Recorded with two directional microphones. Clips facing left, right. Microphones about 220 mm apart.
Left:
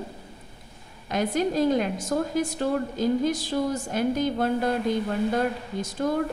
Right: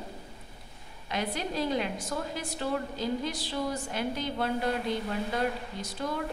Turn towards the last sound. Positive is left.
turn(degrees=45)  # may be behind; listen again after turning